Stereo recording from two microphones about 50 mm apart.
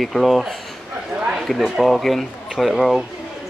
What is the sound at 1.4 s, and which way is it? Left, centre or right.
Speech, centre.